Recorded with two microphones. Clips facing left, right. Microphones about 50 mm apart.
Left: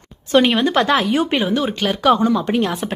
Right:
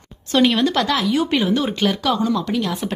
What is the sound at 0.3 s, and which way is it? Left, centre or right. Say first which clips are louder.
Speech: left 2 dB; centre.